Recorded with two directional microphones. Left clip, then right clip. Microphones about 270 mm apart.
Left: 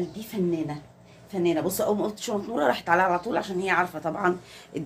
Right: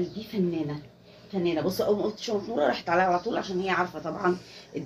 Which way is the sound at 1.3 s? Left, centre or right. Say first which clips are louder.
Left 2 dB; left.